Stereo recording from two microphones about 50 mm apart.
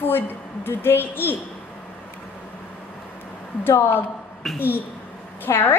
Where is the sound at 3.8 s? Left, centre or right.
Left.